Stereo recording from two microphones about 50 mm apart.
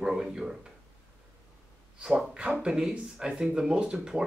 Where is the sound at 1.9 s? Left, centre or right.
Centre.